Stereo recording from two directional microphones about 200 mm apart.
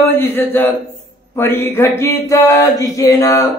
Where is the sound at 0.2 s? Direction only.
10° left (ahead or behind).